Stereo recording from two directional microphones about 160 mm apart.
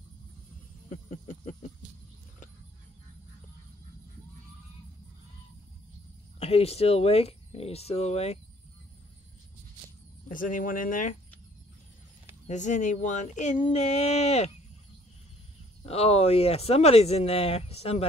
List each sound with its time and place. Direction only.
0.8 s a sound: 50° left (ahead or behind)
6.4 s speech: 40° left (ahead or behind)
10.2 s speech: 55° left (ahead or behind)
12.4 s speech: 50° left (ahead or behind)
15.8 s speech: 40° left (ahead or behind)